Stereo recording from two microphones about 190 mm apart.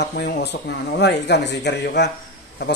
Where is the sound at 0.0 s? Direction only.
55° left (ahead or behind).